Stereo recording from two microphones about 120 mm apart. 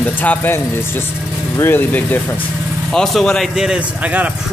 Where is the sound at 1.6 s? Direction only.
15° left (ahead or behind).